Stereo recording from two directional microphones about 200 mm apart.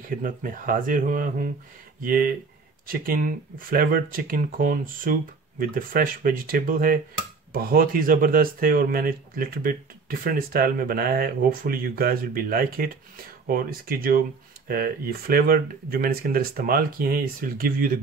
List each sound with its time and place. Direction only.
0.0 s speech: 40° right (ahead or behind)